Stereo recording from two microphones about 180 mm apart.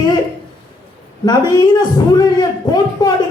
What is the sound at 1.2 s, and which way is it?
A man's voice, 25° left (ahead or behind).